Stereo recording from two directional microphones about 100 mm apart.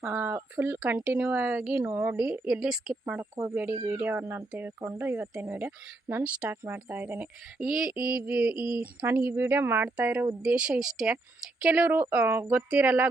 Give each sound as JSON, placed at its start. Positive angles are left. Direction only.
{"t": 0.0, "sound": "speech", "side_deg": -15}
{"t": 1.7, "sound": "speech", "side_deg": -25}
{"t": 3.2, "sound": "speech", "side_deg": -25}
{"t": 7.6, "sound": "speech", "side_deg": -5}